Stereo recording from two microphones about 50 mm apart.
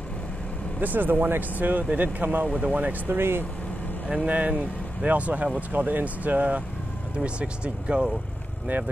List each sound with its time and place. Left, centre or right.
0.7 s speech: right
3.2 s speech: right
4.3 s speech: right